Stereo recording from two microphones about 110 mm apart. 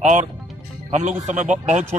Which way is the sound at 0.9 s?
90° right.